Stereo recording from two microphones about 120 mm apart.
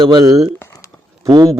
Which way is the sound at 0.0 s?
35° right (ahead or behind).